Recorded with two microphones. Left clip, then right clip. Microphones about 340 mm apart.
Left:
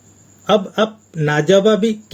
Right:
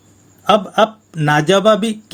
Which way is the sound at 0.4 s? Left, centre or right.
Right.